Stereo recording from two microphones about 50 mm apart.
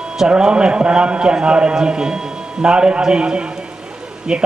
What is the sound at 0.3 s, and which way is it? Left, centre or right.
A man's voice, centre.